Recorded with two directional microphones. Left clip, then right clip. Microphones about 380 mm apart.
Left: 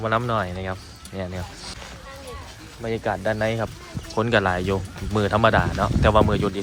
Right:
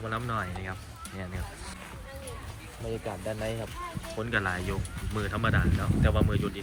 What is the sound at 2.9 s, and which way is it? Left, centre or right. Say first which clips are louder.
Speech: left 11 dB; left.